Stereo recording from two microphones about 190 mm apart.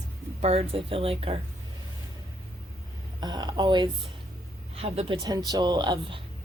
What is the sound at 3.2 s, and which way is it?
A woman's voice, 20° right (ahead or behind).